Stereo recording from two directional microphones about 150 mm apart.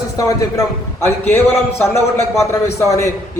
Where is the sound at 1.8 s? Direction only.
20° left (ahead or behind).